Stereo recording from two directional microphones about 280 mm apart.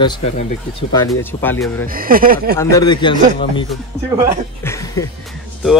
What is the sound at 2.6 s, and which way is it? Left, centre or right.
Speech, centre.